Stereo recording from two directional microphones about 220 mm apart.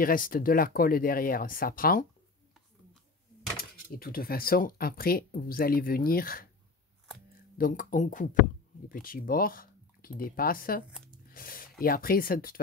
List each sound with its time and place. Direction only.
0.0 s speech: 40° left (ahead or behind)
3.5 s speech: 40° left (ahead or behind)
7.5 s speech: 40° left (ahead or behind)
11.2 s a sound: 40° left (ahead or behind)
11.8 s speech: 40° left (ahead or behind)